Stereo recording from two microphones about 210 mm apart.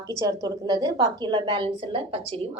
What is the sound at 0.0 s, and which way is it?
A woman's voice, 15° right (ahead or behind).